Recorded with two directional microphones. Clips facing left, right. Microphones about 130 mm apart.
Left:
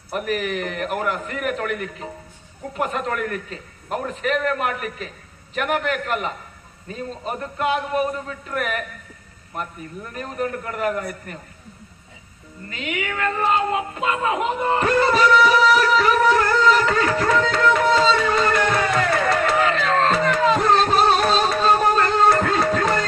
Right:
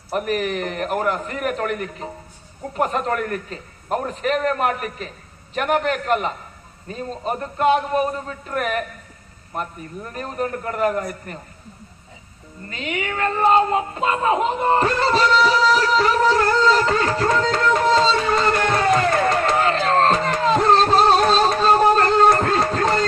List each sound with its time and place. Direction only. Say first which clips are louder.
0.1 s speech: right 2 dB; 40° right (ahead or behind)
12.6 s speech: right 1 dB; 35° right (ahead or behind)
18.8 s music: right 3 dB; 35° right (ahead or behind)